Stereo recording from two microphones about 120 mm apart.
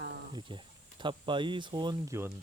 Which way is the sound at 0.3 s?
40° right (ahead or behind).